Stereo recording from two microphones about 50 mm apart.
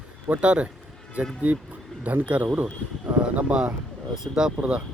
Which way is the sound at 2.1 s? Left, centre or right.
Right.